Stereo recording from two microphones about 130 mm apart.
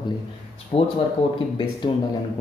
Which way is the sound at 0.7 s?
50° left (ahead or behind).